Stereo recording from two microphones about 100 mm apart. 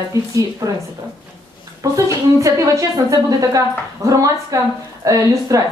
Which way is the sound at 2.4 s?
35° right (ahead or behind).